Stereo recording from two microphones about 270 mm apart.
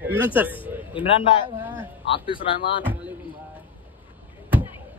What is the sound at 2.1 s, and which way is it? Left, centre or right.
Speech, centre.